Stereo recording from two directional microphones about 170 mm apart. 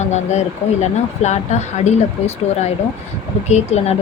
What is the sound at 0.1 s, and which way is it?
Speech, 40° left (ahead or behind).